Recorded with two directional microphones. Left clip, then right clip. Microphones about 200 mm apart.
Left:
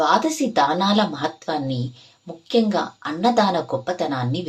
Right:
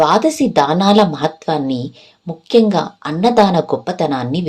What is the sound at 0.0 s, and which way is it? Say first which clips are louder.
A woman's voice: right 6 dB; 35° right (ahead or behind).